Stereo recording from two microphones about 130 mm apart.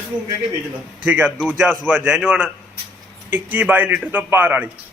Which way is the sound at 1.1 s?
10° right (ahead or behind).